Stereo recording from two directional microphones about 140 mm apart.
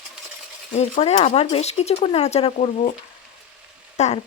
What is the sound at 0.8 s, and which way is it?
Speech, 45° left (ahead or behind).